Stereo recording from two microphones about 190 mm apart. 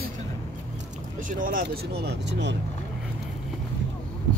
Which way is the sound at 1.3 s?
45° right (ahead or behind).